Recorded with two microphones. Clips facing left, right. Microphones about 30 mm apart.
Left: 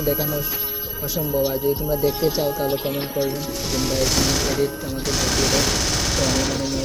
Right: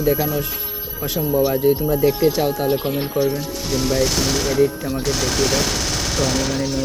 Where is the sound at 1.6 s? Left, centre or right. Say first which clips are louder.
Right 5 dB; right.